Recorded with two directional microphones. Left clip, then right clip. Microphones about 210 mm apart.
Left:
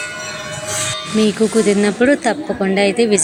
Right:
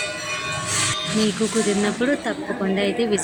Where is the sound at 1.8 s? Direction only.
25° left (ahead or behind).